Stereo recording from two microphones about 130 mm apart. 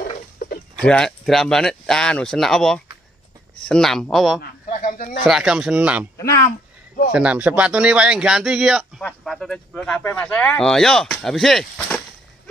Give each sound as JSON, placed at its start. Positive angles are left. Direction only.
{"t": 0.7, "sound": "speech", "side_deg": 5}
{"t": 4.6, "sound": "a sound", "side_deg": 90}
{"t": 5.2, "sound": "speech", "side_deg": -5}
{"t": 7.1, "sound": "speech", "side_deg": -10}